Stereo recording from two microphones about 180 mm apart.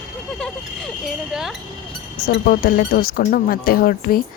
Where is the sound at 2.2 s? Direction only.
55° left (ahead or behind).